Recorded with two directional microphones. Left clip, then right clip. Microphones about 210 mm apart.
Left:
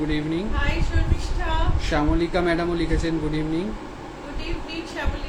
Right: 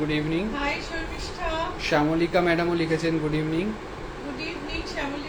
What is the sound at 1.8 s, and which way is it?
A man's voice, 15° left (ahead or behind).